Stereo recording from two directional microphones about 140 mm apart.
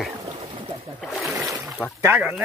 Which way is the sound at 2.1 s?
5° right (ahead or behind).